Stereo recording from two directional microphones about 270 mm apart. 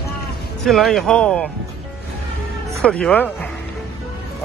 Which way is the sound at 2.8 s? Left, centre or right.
Centre.